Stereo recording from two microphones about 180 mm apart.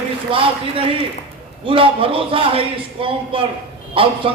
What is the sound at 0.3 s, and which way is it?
A man's voice, 30° right (ahead or behind).